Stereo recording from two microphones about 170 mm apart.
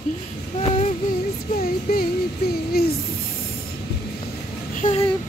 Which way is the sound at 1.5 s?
60° left (ahead or behind).